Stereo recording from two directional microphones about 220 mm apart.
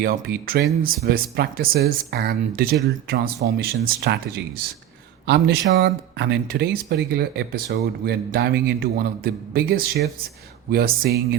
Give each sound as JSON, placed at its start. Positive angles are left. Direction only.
{"t": 0.0, "sound": "speech", "side_deg": -40}